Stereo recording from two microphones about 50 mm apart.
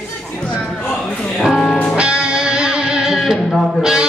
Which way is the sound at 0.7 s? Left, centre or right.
Centre.